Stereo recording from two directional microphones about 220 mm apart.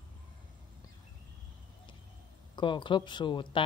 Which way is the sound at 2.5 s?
20° left (ahead or behind).